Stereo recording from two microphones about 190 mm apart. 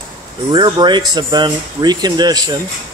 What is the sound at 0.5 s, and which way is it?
Speech, 25° right (ahead or behind).